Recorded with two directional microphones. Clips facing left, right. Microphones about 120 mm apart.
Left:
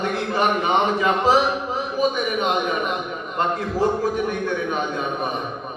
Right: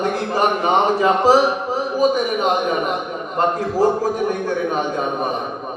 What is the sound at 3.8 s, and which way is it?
Speech, 40° right (ahead or behind).